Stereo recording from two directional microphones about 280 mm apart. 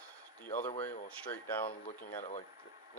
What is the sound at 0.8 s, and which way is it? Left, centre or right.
Speech, centre.